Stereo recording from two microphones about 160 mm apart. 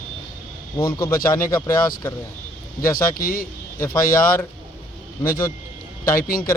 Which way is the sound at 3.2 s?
60° left (ahead or behind).